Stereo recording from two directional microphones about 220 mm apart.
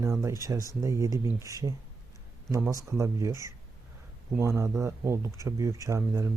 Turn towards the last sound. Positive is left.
turn(degrees=-15)  # may be behind; listen again after turning